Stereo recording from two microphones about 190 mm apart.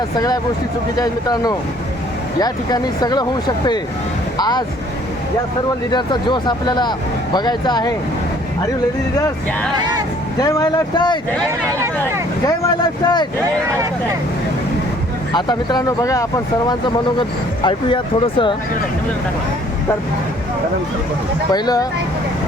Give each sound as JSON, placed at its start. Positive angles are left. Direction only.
{"t": 0.9, "sound": "speech", "side_deg": 20}
{"t": 5.9, "sound": "speech", "side_deg": 25}
{"t": 9.7, "sound": "speech", "side_deg": -20}
{"t": 10.4, "sound": "speech", "side_deg": 20}
{"t": 12.5, "sound": "speech", "side_deg": 20}
{"t": 15.3, "sound": "speech", "side_deg": 20}
{"t": 21.5, "sound": "speech", "side_deg": 20}